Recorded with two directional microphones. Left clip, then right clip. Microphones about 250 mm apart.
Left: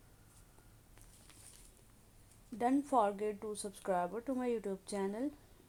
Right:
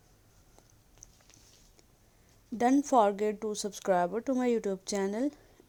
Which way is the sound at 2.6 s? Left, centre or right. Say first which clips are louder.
Right 7 dB; right.